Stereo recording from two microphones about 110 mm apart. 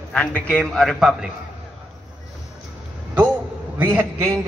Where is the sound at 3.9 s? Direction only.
25° right (ahead or behind).